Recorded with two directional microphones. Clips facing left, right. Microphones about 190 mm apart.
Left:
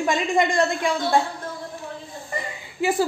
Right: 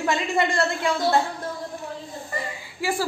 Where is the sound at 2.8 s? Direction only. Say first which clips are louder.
Left 4 dB; 20° left (ahead or behind).